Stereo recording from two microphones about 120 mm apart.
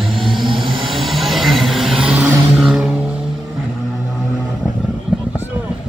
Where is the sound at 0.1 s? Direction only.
45° right (ahead or behind).